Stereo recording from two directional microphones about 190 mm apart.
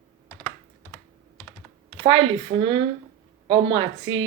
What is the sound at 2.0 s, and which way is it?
Speech, 30° right (ahead or behind).